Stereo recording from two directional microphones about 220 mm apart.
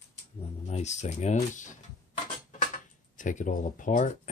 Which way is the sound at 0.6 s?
30° left (ahead or behind).